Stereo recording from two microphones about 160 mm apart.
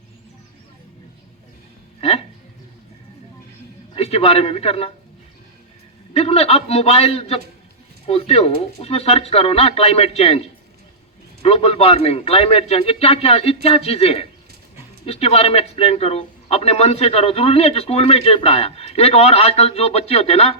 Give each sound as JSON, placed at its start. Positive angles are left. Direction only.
{"t": 2.0, "sound": "a sound", "side_deg": 40}
{"t": 3.9, "sound": "a man's voice", "side_deg": 40}
{"t": 6.1, "sound": "a man's voice", "side_deg": 40}
{"t": 11.4, "sound": "a man's voice", "side_deg": 40}